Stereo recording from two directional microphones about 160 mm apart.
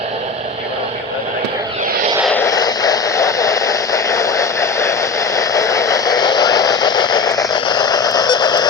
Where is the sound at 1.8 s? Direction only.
60° right (ahead or behind).